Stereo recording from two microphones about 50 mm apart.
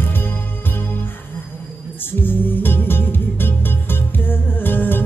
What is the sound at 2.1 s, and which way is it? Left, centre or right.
Music, left.